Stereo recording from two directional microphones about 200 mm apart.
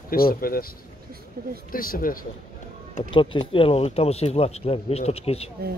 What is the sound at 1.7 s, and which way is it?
Speech, 45° left (ahead or behind).